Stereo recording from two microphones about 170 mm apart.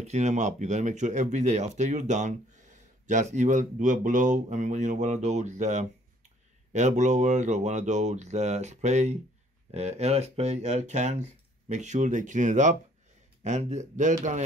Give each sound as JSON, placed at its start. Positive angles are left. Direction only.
{"t": 0.0, "sound": "speech", "side_deg": -40}